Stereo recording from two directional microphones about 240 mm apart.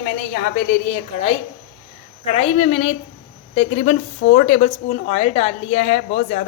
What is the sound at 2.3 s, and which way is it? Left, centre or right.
Speech, left.